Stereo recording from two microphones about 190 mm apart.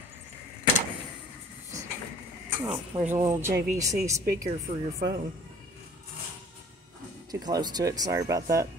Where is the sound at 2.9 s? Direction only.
25° right (ahead or behind).